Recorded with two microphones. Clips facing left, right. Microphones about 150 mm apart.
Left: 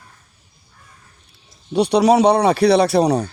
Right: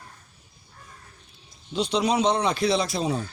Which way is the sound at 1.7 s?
65° left (ahead or behind).